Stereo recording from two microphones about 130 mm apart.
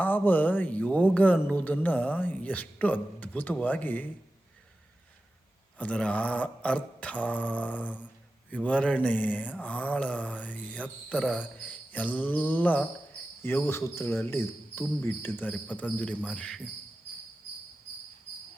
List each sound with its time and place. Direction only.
0.0 s mantra: 15° left (ahead or behind)
5.7 s mantra: 10° left (ahead or behind)
11.6 s cricket: 10° left (ahead or behind)
13.4 s mantra: 15° left (ahead or behind)